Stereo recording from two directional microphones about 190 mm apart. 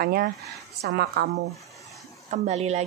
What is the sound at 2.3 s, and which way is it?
Speech, 35° right (ahead or behind).